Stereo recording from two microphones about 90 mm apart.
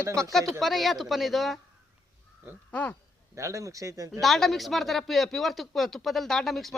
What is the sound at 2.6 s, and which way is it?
Speech, 15° left (ahead or behind).